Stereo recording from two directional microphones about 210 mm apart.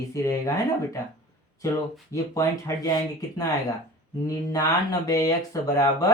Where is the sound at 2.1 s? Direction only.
15° left (ahead or behind).